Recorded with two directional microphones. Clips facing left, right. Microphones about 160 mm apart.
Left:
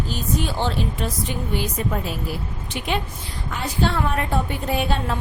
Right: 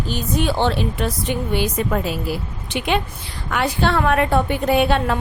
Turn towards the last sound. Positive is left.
turn(degrees=-70)  # may be behind; listen again after turning